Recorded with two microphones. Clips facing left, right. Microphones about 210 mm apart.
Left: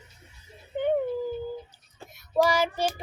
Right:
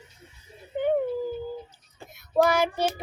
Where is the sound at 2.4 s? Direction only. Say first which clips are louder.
Right 2 dB; 60° right (ahead or behind).